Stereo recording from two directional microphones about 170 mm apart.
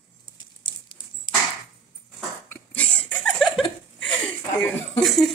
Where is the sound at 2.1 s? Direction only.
5° left (ahead or behind).